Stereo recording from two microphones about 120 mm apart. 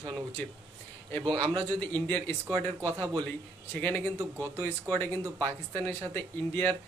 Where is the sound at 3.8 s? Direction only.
15° left (ahead or behind).